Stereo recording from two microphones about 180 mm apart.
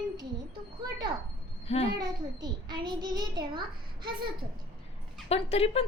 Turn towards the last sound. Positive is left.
turn(degrees=35)  # may be behind; listen again after turning